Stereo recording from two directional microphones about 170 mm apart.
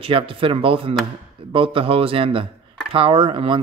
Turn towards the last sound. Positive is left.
turn(degrees=-30)  # may be behind; listen again after turning